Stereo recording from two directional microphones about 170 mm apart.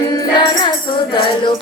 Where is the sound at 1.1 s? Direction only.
30° left (ahead or behind).